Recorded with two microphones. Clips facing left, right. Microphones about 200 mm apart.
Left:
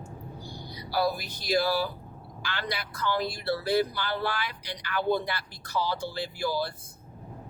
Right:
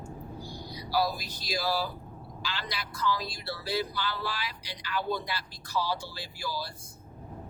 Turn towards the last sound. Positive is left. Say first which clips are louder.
# left 7 dB
turn(degrees=55)  # may be behind; listen again after turning